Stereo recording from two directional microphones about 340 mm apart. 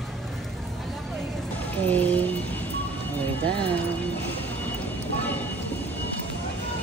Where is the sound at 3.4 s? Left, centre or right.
Centre.